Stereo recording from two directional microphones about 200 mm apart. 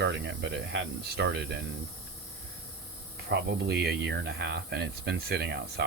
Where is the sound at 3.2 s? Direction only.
55° right (ahead or behind).